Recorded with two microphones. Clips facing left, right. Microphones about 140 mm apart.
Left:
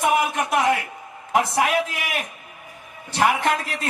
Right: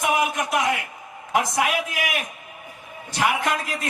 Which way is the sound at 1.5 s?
35° left (ahead or behind).